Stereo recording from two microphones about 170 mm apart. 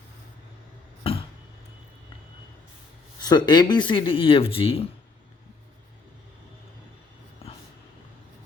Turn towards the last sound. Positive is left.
turn(degrees=35)  # may be behind; listen again after turning